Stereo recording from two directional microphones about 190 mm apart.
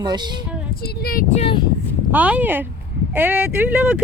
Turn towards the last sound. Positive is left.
turn(degrees=-5)  # may be behind; listen again after turning